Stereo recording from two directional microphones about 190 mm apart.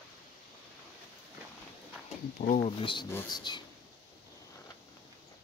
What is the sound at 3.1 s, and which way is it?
Speech, 10° left (ahead or behind).